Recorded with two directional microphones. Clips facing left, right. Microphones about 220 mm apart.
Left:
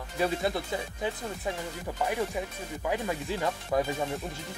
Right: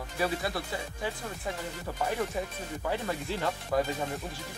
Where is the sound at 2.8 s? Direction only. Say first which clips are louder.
Left 2 dB; 10° left (ahead or behind).